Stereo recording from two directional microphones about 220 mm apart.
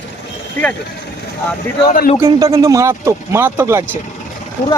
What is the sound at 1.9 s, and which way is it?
Speech, 35° left (ahead or behind).